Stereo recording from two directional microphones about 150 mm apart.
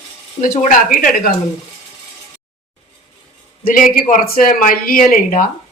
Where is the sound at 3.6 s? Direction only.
65° left (ahead or behind).